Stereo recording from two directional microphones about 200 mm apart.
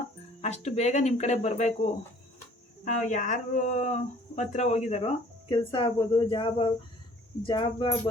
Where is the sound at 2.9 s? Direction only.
35° left (ahead or behind).